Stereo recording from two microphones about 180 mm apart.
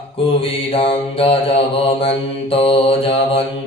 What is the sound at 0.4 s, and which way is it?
Mantra, 30° left (ahead or behind).